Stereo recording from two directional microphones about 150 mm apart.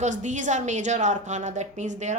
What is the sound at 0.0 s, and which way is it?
A woman's voice, 55° right (ahead or behind).